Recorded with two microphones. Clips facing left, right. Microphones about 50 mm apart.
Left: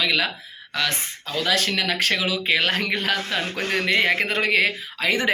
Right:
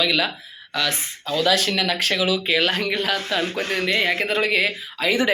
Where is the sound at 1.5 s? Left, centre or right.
Left.